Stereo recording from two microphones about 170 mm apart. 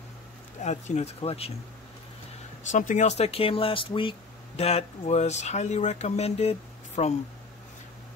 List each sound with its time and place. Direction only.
0.6 s speech: 40° left (ahead or behind)
2.7 s speech: 45° left (ahead or behind)